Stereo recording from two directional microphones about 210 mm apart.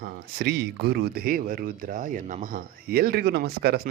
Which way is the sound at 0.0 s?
50° right (ahead or behind).